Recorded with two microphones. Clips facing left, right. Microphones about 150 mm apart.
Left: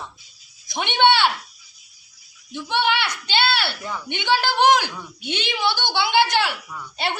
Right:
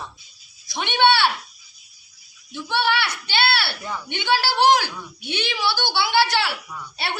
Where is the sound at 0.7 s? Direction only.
20° left (ahead or behind).